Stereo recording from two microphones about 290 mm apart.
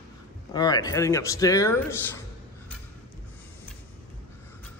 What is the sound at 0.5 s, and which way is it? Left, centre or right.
A man's voice, centre.